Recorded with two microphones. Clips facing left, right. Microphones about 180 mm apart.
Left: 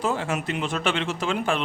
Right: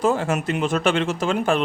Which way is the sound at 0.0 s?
45° right (ahead or behind).